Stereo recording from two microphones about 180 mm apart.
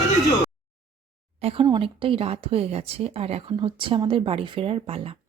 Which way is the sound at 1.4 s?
30° right (ahead or behind).